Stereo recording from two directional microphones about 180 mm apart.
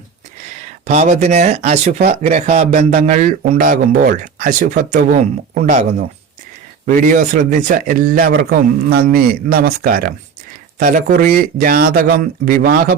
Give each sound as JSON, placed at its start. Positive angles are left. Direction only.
{"t": 0.9, "sound": "a man's voice", "side_deg": -40}